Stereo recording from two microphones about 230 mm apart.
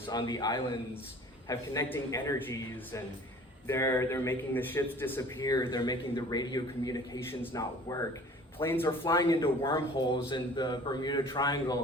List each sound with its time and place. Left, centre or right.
0.1 s a man's voice: centre